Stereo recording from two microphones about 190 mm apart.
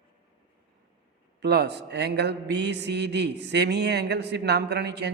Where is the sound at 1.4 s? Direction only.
60° right (ahead or behind).